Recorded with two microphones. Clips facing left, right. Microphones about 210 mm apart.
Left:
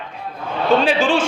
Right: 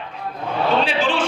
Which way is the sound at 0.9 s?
45° left (ahead or behind).